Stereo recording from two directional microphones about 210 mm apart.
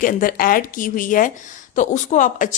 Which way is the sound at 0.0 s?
40° left (ahead or behind).